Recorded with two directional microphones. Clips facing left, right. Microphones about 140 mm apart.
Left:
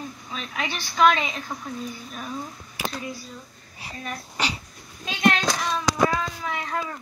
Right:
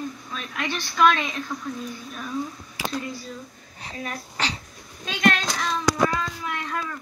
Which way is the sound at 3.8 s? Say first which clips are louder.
Right 1 dB; centre (ahead or behind).